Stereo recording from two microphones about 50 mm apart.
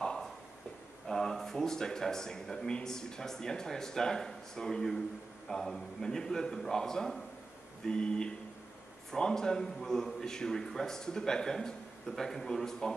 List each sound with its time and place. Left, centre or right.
1.0 s speech: centre